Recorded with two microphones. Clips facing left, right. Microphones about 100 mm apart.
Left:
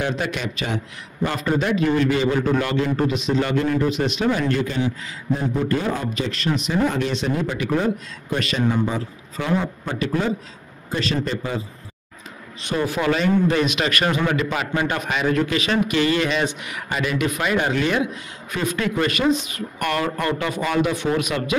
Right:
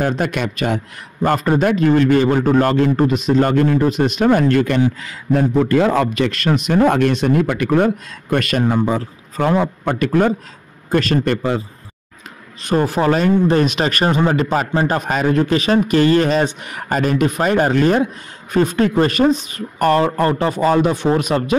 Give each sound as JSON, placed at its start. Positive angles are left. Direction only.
{"t": 0.0, "sound": "a man's voice", "side_deg": -50}
{"t": 12.6, "sound": "speech", "side_deg": -40}